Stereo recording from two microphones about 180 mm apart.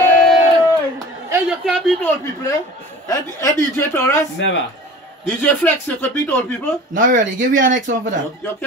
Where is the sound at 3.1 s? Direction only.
15° left (ahead or behind).